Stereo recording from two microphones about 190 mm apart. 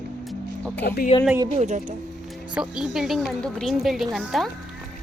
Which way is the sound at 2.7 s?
5° right (ahead or behind).